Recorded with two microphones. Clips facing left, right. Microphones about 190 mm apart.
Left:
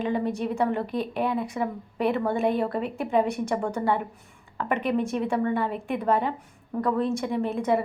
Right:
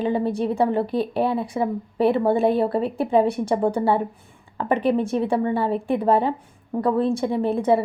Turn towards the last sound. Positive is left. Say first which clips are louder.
# right 5 dB
turn(degrees=-30)  # may be behind; listen again after turning